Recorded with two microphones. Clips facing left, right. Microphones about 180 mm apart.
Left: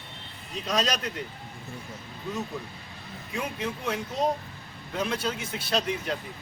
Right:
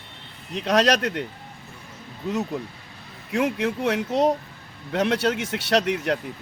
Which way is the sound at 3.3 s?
80° right.